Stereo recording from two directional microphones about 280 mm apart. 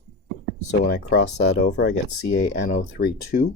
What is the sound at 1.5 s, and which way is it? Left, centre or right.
Speech, left.